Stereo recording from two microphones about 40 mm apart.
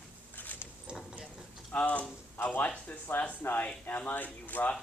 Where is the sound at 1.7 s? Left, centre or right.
Left.